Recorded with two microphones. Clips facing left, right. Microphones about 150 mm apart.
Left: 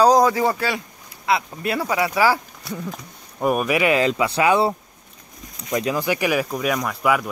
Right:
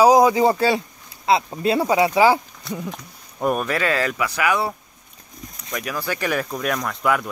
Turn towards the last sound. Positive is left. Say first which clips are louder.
# left 1 dB
turn(degrees=5)  # may be behind; listen again after turning